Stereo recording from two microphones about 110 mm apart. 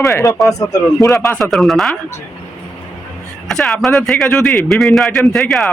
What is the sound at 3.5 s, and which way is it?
A man's voice, 5° left (ahead or behind).